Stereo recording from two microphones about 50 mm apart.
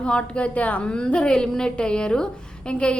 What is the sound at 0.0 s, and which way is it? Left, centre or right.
A woman's voice, left.